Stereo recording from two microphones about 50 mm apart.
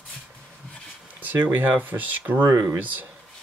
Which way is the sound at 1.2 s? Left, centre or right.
Right.